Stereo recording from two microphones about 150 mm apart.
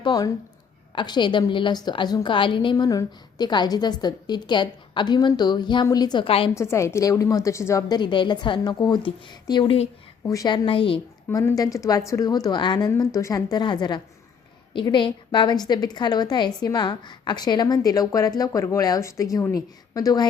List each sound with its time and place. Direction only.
0.0 s a woman's voice: 25° left (ahead or behind)
6.5 s a woman's voice: 20° left (ahead or behind); by 11.0 s 35° left (ahead or behind)
11.3 s a woman's voice: 20° left (ahead or behind)